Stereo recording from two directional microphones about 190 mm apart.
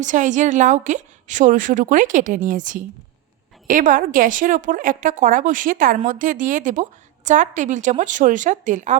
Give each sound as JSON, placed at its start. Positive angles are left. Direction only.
{"t": 0.0, "sound": "a woman's voice", "side_deg": -40}